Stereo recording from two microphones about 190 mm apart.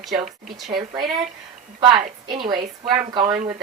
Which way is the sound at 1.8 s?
25° right (ahead or behind).